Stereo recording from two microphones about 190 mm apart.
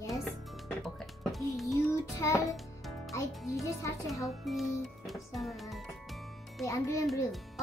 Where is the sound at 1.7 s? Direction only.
15° left (ahead or behind).